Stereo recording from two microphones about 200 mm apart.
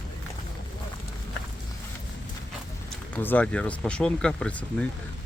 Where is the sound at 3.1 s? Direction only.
10° left (ahead or behind).